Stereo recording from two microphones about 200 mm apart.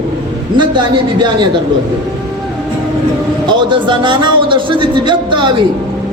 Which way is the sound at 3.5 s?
25° right (ahead or behind).